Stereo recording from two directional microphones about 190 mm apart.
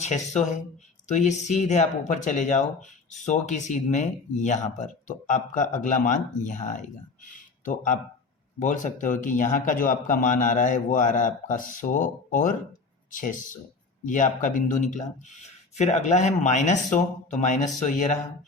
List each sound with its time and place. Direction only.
0.0 s speech: 40° left (ahead or behind)
7.3 s a sound: 45° left (ahead or behind)
8.5 s speech: 40° left (ahead or behind)